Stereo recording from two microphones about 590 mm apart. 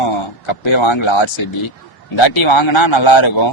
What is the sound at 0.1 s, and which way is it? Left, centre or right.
A man's voice, left.